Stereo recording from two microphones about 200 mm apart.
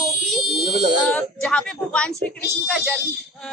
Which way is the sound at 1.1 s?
5° left (ahead or behind).